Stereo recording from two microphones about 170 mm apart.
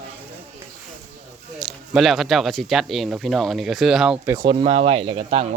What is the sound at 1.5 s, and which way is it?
Speech, centre (ahead or behind).